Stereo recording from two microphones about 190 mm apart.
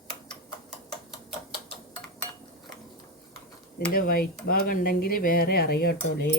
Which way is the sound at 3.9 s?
50° left (ahead or behind).